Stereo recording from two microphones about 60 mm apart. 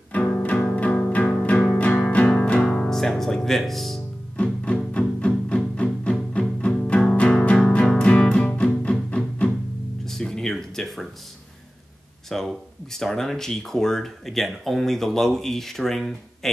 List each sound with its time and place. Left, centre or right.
0.1 s music: left
2.9 s music: centre
4.4 s music: left
10.0 s a sound: centre
12.3 s speech: centre